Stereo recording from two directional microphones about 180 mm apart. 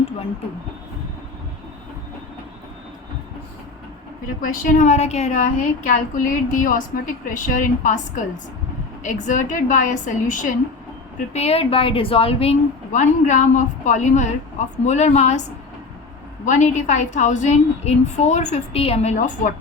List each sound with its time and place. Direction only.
4.4 s a woman's voice: 45° left (ahead or behind)
11.3 s a woman's voice: 35° left (ahead or behind)
16.5 s a woman's voice: 45° left (ahead or behind)